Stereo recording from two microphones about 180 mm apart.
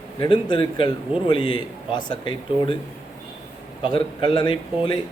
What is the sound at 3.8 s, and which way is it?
Speech, 25° left (ahead or behind).